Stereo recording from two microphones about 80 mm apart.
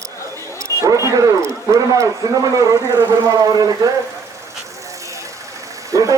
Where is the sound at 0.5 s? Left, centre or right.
Right.